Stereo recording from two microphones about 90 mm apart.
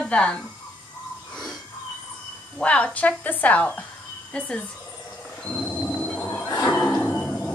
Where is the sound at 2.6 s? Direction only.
15° left (ahead or behind).